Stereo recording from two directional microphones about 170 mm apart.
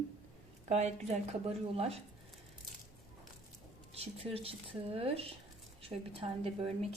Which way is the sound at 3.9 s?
35° right (ahead or behind).